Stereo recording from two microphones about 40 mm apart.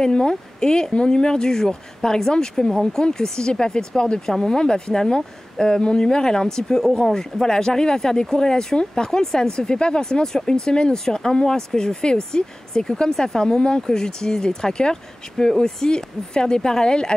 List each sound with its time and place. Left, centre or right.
0.0 s speech: centre